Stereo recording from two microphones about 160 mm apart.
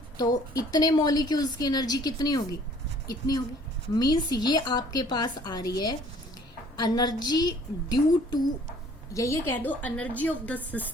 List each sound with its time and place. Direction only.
0.2 s a woman's voice: 25° left (ahead or behind)